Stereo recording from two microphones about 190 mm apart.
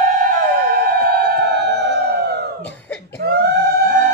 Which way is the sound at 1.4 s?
60° right (ahead or behind).